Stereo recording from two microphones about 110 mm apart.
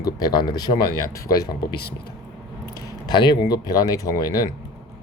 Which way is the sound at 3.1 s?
45° left (ahead or behind).